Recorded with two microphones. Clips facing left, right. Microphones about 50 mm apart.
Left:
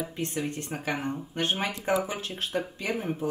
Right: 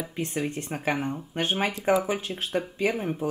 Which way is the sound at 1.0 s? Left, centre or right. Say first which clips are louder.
Right 1 dB; centre.